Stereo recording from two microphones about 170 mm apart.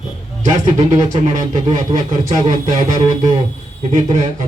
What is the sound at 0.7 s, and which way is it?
Speech, 45° right (ahead or behind).